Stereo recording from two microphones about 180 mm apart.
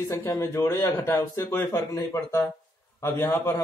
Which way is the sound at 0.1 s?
15° left (ahead or behind).